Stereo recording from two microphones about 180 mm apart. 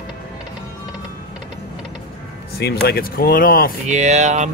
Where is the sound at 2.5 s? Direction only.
60° left (ahead or behind).